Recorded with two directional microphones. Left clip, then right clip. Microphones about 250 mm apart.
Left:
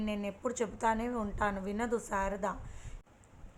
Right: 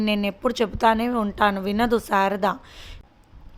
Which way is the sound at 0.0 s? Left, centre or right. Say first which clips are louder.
Right 13 dB; right.